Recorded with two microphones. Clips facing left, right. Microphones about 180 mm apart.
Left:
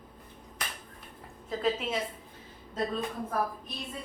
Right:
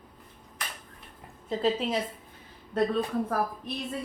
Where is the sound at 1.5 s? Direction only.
30° right (ahead or behind).